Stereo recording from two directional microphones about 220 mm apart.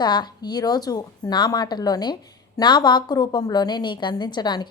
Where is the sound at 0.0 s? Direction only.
20° left (ahead or behind).